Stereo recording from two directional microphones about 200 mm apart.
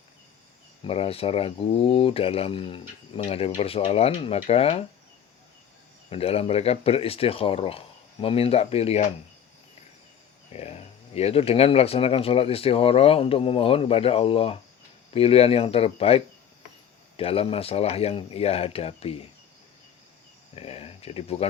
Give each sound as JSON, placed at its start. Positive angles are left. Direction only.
{"t": 0.9, "sound": "speech", "side_deg": 30}
{"t": 6.1, "sound": "speech", "side_deg": 30}
{"t": 10.5, "sound": "speech", "side_deg": 30}
{"t": 20.6, "sound": "speech", "side_deg": 30}